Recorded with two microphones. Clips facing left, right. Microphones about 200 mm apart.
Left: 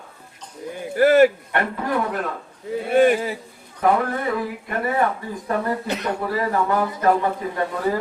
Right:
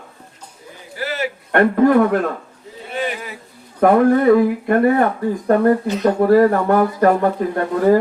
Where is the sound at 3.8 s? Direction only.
55° right (ahead or behind).